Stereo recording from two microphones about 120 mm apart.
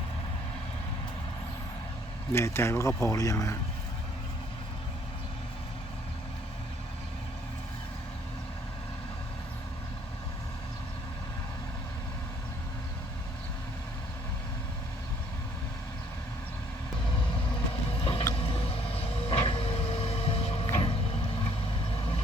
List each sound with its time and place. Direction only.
2.3 s speech: 20° left (ahead or behind)
17.9 s vehicle: 50° left (ahead or behind)